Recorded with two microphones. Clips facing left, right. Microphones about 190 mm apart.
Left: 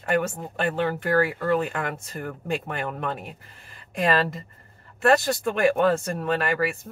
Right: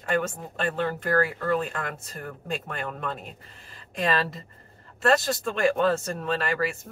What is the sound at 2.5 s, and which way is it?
Speech, 65° left (ahead or behind).